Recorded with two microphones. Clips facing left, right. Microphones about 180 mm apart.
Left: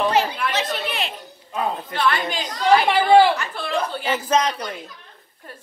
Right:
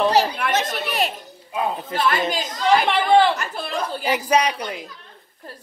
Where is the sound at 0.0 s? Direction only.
40° right (ahead or behind).